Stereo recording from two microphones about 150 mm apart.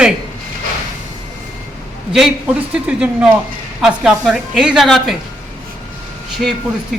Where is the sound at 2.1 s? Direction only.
5° right (ahead or behind).